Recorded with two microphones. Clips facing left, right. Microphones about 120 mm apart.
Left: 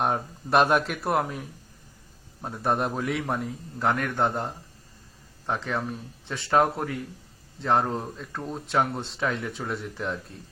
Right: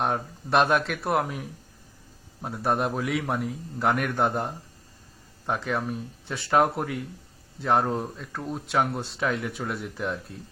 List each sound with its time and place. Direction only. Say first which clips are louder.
0.0 s speech: left 1 dB; centre (ahead or behind)